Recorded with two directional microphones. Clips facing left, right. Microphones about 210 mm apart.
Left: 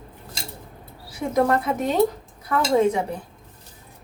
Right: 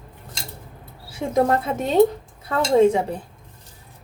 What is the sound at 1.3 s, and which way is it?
Speech, 25° right (ahead or behind).